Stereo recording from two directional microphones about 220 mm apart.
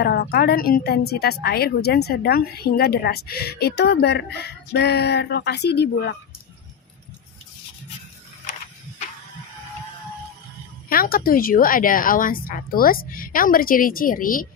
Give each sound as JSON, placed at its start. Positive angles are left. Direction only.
{"t": 0.0, "sound": "a woman's voice", "side_deg": 45}
{"t": 10.8, "sound": "a woman's voice", "side_deg": 40}